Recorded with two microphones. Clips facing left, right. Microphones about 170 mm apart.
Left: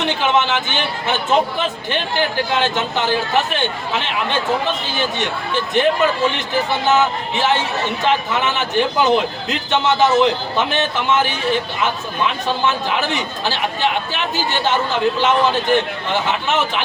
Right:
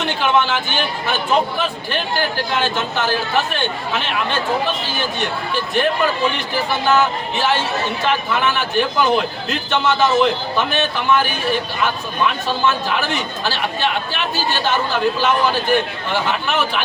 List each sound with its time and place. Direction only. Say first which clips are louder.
0.0 s a man's voice: even; 20° left (ahead or behind)